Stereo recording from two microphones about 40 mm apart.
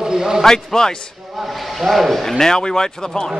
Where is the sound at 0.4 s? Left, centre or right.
Centre.